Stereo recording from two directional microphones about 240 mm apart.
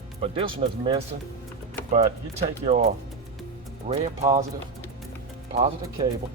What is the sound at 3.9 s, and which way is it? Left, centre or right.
Speech, right.